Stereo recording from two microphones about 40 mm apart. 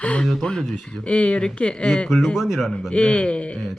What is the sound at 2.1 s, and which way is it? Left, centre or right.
Speech, centre.